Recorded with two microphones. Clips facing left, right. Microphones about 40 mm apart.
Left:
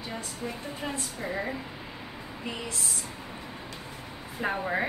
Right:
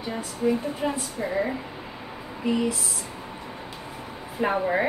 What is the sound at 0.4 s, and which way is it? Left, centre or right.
A woman's voice, centre.